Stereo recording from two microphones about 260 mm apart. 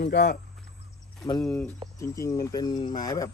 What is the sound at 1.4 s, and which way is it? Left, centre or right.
Speech, centre.